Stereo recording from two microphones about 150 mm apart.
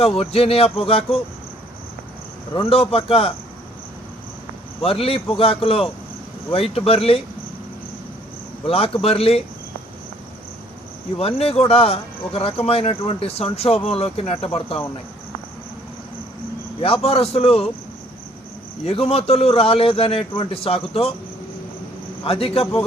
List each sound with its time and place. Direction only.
0.0 s speech: 40° left (ahead or behind)
2.5 s speech: 40° left (ahead or behind)
4.8 s speech: 40° left (ahead or behind)
8.6 s speech: 40° left (ahead or behind)
11.2 s speech: 40° left (ahead or behind)
16.8 s speech: 40° left (ahead or behind)
18.9 s speech: 40° left (ahead or behind)
22.2 s speech: 40° left (ahead or behind)